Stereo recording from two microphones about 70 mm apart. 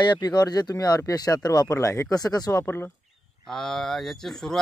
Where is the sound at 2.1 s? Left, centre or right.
Left.